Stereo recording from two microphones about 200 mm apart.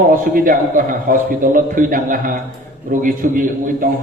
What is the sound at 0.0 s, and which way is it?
A man's voice, 45° right (ahead or behind).